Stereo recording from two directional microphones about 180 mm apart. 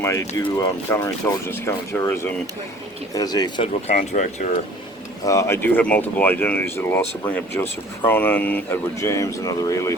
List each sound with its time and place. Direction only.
0.0 s speech: 20° left (ahead or behind)
3.8 s speech: 45° left (ahead or behind)
5.2 s speech: 15° left (ahead or behind)